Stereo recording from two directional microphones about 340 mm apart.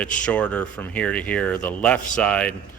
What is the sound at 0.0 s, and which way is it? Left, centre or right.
Speech, centre.